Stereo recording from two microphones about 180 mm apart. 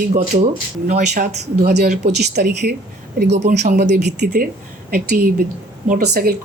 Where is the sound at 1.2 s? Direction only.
65° right (ahead or behind).